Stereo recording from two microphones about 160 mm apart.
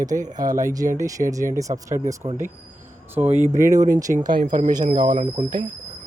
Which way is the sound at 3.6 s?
20° right (ahead or behind).